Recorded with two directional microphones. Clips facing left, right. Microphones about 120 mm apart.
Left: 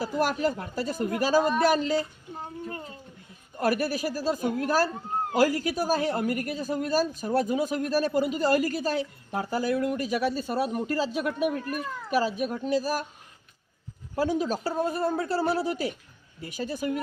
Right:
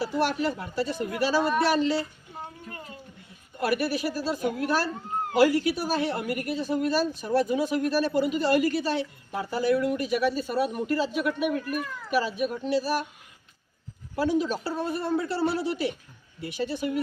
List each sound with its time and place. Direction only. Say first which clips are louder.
0.0 s speech: even; 45° left (ahead or behind)
3.6 s a woman's voice: even; 40° left (ahead or behind)
14.2 s a woman's voice: right 1 dB; 40° left (ahead or behind)